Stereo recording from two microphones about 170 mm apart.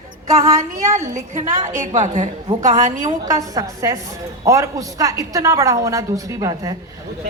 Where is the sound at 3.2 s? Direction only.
20° right (ahead or behind).